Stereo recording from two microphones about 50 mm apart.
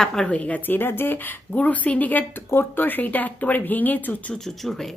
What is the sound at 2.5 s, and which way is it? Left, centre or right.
Speech, left.